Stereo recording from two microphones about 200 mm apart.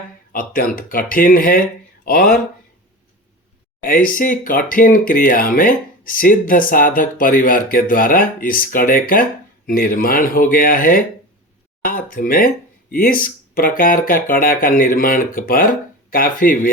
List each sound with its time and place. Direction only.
0.3 s speech: 45° left (ahead or behind)
3.8 s speech: 45° left (ahead or behind)